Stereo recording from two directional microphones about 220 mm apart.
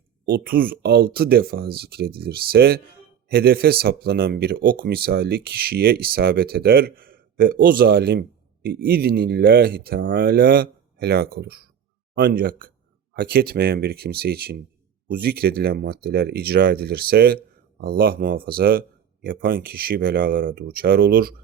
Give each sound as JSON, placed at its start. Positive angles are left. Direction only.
{"t": 0.3, "sound": "speech", "side_deg": -40}